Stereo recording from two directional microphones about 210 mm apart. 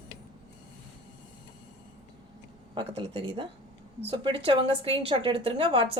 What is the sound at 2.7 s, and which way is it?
A woman's voice, 25° right (ahead or behind).